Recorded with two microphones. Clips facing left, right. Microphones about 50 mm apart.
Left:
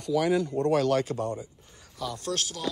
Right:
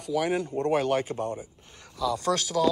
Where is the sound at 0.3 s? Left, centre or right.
Right.